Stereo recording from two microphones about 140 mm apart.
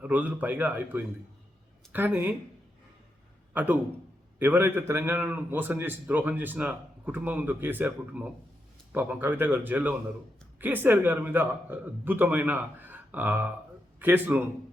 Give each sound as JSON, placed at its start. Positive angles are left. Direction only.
{"t": 0.0, "sound": "a man's voice", "side_deg": -10}
{"t": 3.5, "sound": "a man's voice", "side_deg": -10}